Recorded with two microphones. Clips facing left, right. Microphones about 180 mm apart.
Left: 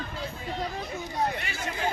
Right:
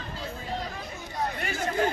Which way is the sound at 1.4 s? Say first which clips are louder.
Right 5 dB; 45° right (ahead or behind).